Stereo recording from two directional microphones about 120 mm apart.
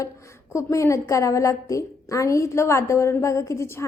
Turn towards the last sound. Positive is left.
turn(degrees=25)  # may be behind; listen again after turning